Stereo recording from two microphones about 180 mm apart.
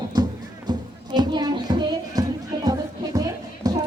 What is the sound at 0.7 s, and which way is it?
Music, 25° right (ahead or behind).